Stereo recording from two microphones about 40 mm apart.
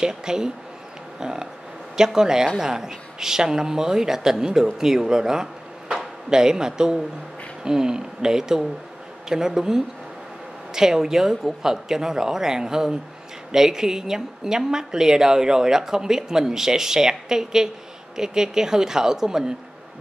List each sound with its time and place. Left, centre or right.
0.0 s a woman's voice: centre